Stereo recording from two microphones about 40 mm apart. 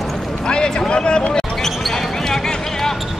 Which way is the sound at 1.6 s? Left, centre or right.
Centre.